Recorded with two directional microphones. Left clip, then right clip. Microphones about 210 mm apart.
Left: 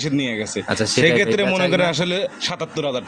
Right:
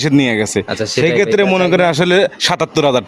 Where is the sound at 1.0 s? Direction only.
40° right (ahead or behind).